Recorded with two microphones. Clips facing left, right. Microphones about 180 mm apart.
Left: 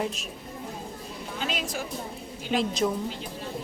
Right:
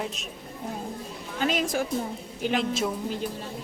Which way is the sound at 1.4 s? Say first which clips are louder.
Right 7 dB; 50° right (ahead or behind).